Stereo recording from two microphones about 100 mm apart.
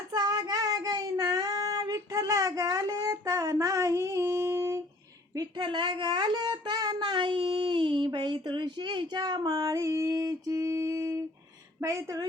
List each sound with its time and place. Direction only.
0.1 s child singing: 45° right (ahead or behind); by 4.8 s 30° right (ahead or behind)
5.3 s speech: 40° right (ahead or behind)
5.6 s a sound: 55° right (ahead or behind); by 11.2 s 30° right (ahead or behind)
11.8 s speech: 30° right (ahead or behind)